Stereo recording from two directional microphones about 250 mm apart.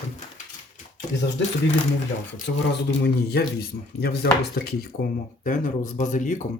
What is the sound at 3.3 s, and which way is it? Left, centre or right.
Speech, left.